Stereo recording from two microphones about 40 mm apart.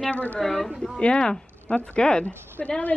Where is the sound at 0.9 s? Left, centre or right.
Left.